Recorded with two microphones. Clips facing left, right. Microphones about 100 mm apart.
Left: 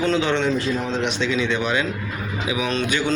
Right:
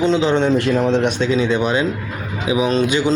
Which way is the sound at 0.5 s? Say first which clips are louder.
Right 7 dB; 65° right (ahead or behind).